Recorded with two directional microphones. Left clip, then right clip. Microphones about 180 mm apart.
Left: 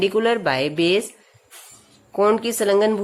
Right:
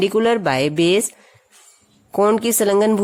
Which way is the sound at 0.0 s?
40° right (ahead or behind).